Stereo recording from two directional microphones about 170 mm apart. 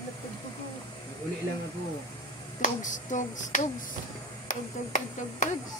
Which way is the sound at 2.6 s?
50° left (ahead or behind).